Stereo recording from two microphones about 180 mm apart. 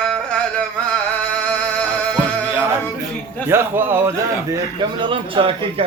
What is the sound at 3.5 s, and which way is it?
Speech, 10° right (ahead or behind).